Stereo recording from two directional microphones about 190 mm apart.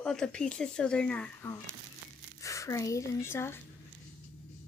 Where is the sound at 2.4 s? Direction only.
15° left (ahead or behind).